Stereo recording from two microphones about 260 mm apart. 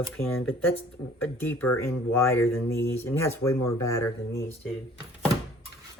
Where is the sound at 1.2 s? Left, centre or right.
Centre.